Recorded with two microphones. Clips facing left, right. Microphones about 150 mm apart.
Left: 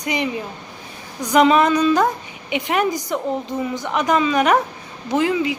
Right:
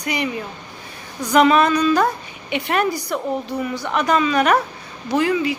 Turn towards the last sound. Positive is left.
turn(degrees=20)  # may be behind; listen again after turning